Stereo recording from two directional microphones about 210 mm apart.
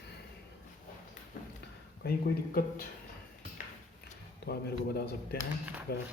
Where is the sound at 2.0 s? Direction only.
45° left (ahead or behind).